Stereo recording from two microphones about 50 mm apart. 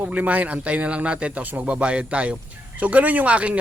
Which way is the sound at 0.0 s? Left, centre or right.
Right.